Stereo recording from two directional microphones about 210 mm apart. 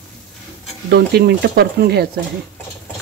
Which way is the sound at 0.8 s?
50° right (ahead or behind).